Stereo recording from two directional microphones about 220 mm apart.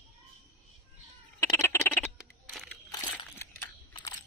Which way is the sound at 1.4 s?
10° left (ahead or behind).